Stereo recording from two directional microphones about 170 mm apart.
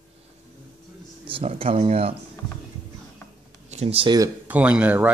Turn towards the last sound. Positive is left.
turn(degrees=-10)  # may be behind; listen again after turning